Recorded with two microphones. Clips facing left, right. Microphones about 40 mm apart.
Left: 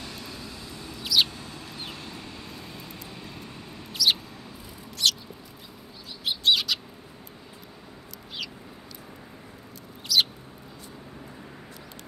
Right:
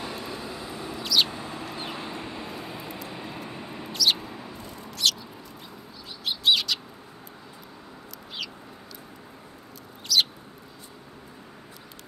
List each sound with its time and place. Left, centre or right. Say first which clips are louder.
0.0 s mouse: right 5 dB; centre
1.0 s mouse: even; centre
1.3 s a sound: right 5 dB; centre
3.1 s vehicle: right 5 dB; centre
3.9 s mouse: even; centre
5.0 s chicken: even; centre
6.4 s bird: right 1 dB; centre
10.1 s bird: even; centre